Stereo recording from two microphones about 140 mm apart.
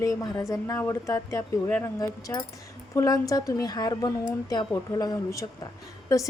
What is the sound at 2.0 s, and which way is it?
A woman's voice, 25° left (ahead or behind).